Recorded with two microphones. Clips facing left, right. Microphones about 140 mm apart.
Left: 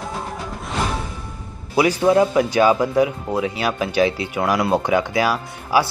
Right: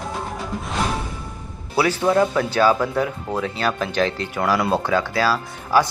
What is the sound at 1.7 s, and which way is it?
Speech, 15° left (ahead or behind).